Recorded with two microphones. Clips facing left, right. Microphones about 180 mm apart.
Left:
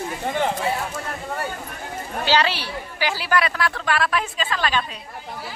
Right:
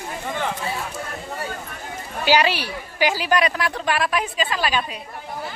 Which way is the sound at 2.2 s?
15° right (ahead or behind).